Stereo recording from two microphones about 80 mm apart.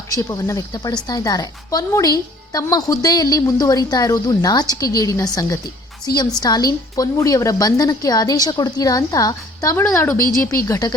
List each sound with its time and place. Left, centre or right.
0.1 s a woman's voice: left
9.7 s speech: left
10.5 s a woman's voice: left